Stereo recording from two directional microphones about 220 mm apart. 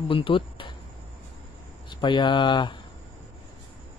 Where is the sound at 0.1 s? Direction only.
25° left (ahead or behind).